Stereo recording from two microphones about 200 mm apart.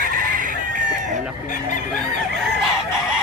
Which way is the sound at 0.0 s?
40° right (ahead or behind).